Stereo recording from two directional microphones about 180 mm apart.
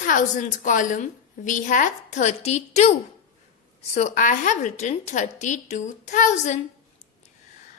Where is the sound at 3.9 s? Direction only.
45° left (ahead or behind).